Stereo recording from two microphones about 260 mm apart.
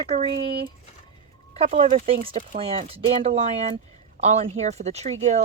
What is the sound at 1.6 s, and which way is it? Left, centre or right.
Speech, right.